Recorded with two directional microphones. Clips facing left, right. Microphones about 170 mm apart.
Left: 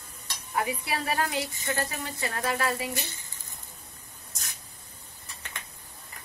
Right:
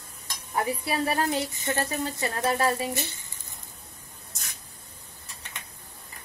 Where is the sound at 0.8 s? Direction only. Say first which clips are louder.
Right 3 dB; 30° right (ahead or behind).